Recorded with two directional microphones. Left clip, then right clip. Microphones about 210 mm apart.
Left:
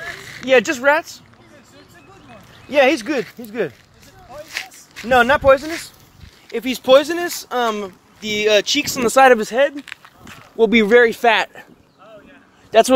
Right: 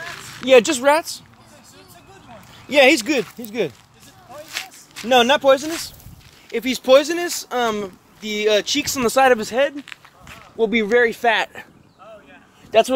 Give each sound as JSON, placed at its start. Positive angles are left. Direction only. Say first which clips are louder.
{"t": 0.5, "sound": "speech", "louder": "right 1 dB", "side_deg": -20}
{"t": 2.7, "sound": "speech", "louder": "right 1 dB", "side_deg": -20}
{"t": 4.5, "sound": "a sound", "louder": "left 1 dB", "side_deg": 0}
{"t": 5.0, "sound": "speech", "louder": "left 1 dB", "side_deg": -10}
{"t": 8.2, "sound": "speech", "louder": "left 3 dB", "side_deg": 30}
{"t": 9.1, "sound": "speech", "louder": "left 4 dB", "side_deg": 15}
{"t": 9.8, "sound": "a sound", "louder": "left 2 dB", "side_deg": 60}
{"t": 10.6, "sound": "speech", "louder": "left 4 dB", "side_deg": 40}